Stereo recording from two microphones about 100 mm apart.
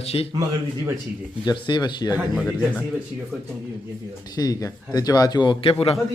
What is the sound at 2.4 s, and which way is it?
Speech, 10° left (ahead or behind).